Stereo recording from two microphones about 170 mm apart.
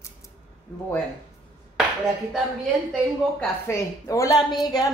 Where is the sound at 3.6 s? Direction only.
15° left (ahead or behind).